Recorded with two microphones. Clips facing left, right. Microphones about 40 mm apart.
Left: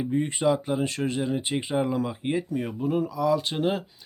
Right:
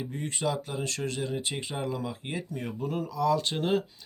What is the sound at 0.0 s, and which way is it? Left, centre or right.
Speech, left.